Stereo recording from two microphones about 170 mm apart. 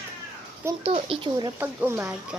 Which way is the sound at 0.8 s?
30° right (ahead or behind).